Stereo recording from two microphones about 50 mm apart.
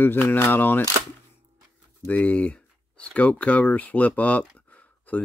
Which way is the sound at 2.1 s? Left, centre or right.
Left.